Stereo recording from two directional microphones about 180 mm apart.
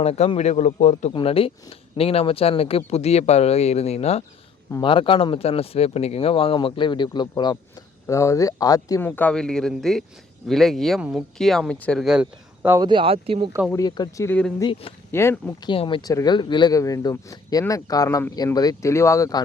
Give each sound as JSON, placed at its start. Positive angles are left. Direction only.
{"t": 0.0, "sound": "speech", "side_deg": 35}
{"t": 1.1, "sound": "speech", "side_deg": 30}
{"t": 12.8, "sound": "speech", "side_deg": -25}
{"t": 13.7, "sound": "speech", "side_deg": 20}
{"t": 14.3, "sound": "speech", "side_deg": 5}
{"t": 14.6, "sound": "speech", "side_deg": 30}
{"t": 15.1, "sound": "speech", "side_deg": 15}
{"t": 15.6, "sound": "speech", "side_deg": 30}